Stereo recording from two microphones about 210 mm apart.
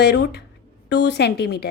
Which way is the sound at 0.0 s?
55° left (ahead or behind).